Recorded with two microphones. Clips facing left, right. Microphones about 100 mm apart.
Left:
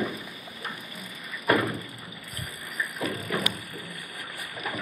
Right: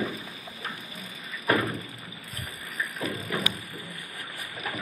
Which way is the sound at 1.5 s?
5° left (ahead or behind).